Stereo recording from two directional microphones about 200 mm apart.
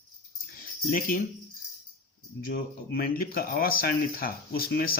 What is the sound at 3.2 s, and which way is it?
Speech, 45° left (ahead or behind).